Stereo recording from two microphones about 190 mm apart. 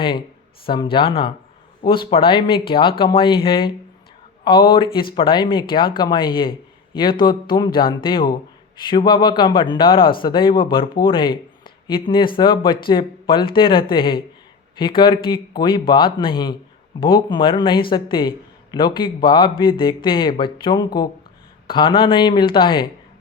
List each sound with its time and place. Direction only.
0.6 s a man's voice: 25° left (ahead or behind)